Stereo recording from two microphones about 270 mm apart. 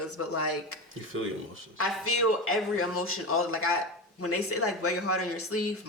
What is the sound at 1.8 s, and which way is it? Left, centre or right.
Speech, left.